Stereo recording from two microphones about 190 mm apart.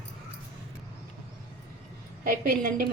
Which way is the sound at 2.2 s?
45° right (ahead or behind).